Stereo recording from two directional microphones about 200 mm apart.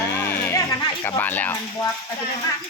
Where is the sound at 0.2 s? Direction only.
10° left (ahead or behind).